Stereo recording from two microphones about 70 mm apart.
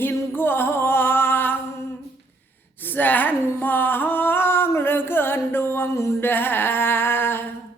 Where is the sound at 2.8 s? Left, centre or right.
Left.